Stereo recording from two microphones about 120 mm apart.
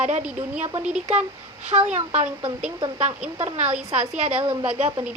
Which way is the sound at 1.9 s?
70° right (ahead or behind).